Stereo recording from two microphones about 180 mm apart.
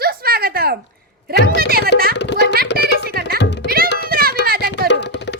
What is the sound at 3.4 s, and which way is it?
Music, 70° left (ahead or behind).